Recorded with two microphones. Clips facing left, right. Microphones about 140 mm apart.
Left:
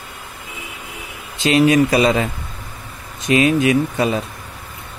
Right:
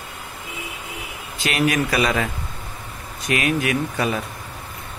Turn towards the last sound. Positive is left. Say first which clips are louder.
# left 6 dB
turn(degrees=25)  # may be behind; listen again after turning